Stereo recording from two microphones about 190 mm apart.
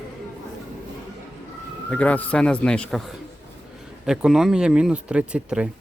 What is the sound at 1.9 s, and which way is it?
Speech, 5° left (ahead or behind).